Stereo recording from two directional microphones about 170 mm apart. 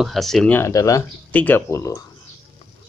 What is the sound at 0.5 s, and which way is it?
Speech, 15° left (ahead or behind).